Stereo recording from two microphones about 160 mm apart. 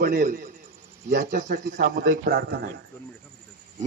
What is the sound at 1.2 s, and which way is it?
Speech, 50° right (ahead or behind).